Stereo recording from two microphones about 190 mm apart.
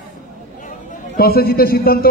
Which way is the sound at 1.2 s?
50° left (ahead or behind).